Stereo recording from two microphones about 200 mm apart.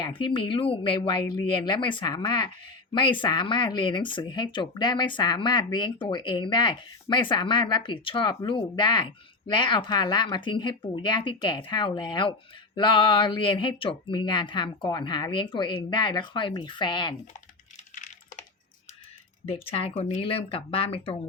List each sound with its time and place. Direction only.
0.0 s speech: 25° left (ahead or behind)
19.5 s speech: 30° left (ahead or behind)